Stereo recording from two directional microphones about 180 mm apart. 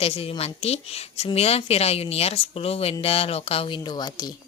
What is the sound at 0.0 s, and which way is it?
A woman's voice, 30° left (ahead or behind).